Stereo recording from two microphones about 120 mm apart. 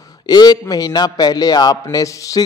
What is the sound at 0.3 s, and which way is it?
A man's voice, 35° left (ahead or behind).